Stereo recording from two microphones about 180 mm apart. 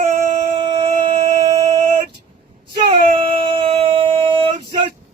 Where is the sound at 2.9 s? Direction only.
30° right (ahead or behind).